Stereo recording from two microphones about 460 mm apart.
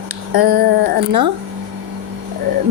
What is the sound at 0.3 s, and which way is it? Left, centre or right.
Speech, right.